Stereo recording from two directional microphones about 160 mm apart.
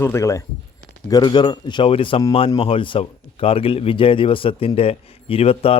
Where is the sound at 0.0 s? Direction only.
15° left (ahead or behind).